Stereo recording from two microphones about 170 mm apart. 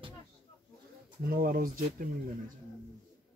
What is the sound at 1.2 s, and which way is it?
Speech, 60° right (ahead or behind).